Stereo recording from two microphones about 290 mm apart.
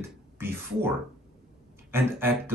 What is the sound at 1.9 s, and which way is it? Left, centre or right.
Speech, centre.